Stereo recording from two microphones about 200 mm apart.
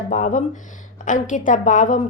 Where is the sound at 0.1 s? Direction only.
40° left (ahead or behind).